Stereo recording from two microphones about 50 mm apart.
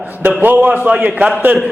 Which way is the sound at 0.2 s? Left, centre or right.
Right.